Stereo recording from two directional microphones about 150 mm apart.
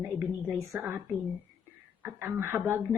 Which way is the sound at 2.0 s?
15° right (ahead or behind).